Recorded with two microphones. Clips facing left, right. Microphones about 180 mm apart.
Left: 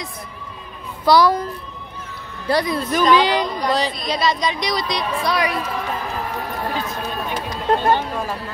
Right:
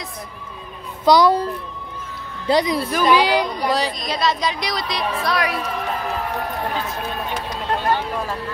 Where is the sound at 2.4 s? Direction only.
20° right (ahead or behind).